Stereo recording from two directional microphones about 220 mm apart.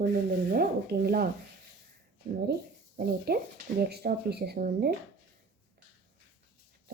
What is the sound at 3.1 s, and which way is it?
Speech, 45° right (ahead or behind).